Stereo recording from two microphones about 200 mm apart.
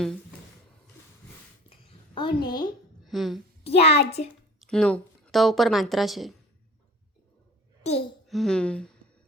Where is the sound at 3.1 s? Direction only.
Centre (ahead or behind).